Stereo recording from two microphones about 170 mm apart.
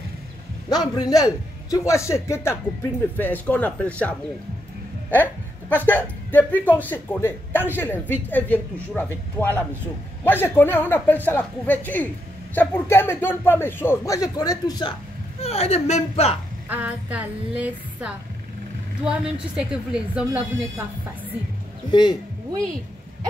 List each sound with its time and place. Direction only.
0.7 s a man's voice: 25° left (ahead or behind)
5.1 s a woman's voice: 10° left (ahead or behind)
15.4 s speech: 35° left (ahead or behind)
16.6 s a sound: 10° right (ahead or behind)
19.0 s a woman's voice: 5° right (ahead or behind)